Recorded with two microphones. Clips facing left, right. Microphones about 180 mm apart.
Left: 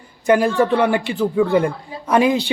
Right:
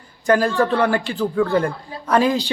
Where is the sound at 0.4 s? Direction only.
10° left (ahead or behind).